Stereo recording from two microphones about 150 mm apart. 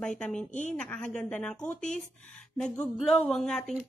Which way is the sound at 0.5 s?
50° left (ahead or behind).